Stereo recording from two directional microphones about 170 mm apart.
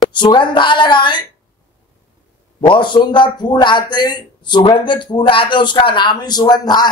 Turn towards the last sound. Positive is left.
turn(degrees=25)  # may be behind; listen again after turning